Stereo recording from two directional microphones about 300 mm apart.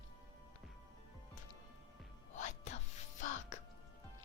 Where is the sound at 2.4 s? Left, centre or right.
Left.